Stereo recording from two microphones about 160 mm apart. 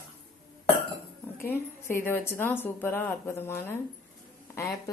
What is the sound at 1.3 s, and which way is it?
A woman's voice, 15° left (ahead or behind).